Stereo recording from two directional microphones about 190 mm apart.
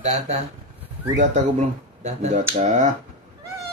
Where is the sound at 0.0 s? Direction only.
35° right (ahead or behind).